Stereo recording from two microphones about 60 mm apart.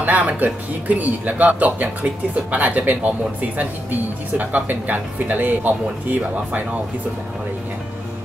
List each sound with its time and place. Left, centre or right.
0.0 s speech: right